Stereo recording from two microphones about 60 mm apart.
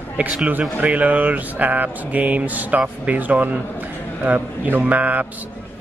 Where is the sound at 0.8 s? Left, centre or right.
Right.